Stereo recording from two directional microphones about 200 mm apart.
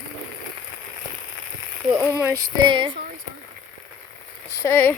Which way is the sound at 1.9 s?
15° right (ahead or behind).